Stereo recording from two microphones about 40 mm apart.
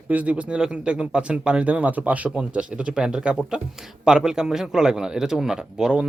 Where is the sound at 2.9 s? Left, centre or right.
Centre.